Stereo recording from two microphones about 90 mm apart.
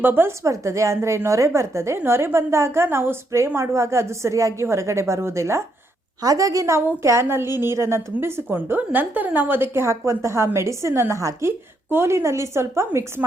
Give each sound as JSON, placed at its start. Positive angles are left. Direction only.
{"t": 0.0, "sound": "a woman's voice", "side_deg": -25}